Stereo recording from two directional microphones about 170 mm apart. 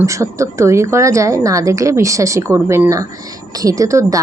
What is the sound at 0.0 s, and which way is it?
A woman's voice, 15° right (ahead or behind).